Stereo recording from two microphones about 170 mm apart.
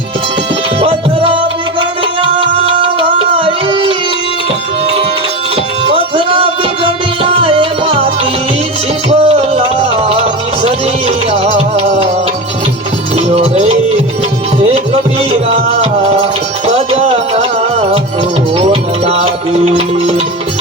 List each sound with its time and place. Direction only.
0.8 s music: 35° right (ahead or behind)
3.3 s a sound: 30° right (ahead or behind)
6.1 s music: 30° right (ahead or behind)
9.0 s music: 35° right (ahead or behind)
13.3 s music: 35° right (ahead or behind)
15.3 s music: 35° right (ahead or behind)
18.5 s music: 35° right (ahead or behind)